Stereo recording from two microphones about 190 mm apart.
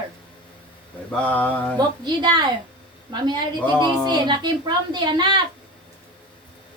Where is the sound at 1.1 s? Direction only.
10° left (ahead or behind).